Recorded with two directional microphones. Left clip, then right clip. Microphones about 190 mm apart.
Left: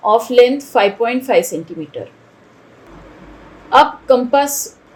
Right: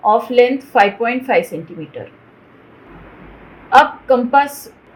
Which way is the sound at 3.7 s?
40° left (ahead or behind).